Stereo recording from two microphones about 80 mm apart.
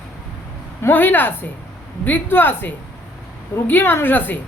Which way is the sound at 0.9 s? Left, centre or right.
Left.